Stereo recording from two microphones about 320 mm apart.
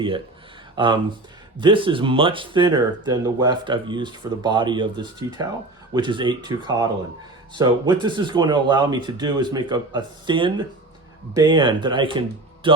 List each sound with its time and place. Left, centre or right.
0.8 s speech: centre